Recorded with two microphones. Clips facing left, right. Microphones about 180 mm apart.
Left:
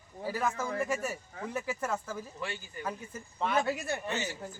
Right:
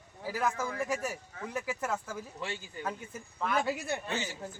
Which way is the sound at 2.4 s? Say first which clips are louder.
Right 1 dB; 25° right (ahead or behind).